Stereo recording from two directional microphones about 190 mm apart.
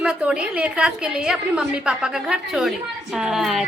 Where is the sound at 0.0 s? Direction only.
5° right (ahead or behind).